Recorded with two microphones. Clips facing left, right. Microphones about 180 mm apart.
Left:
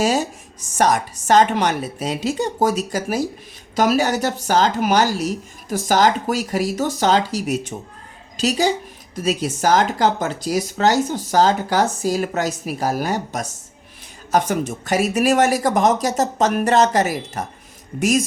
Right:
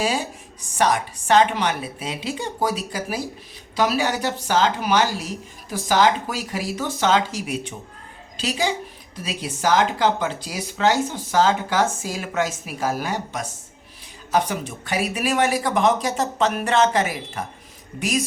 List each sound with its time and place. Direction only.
0.0 s speech: 40° left (ahead or behind)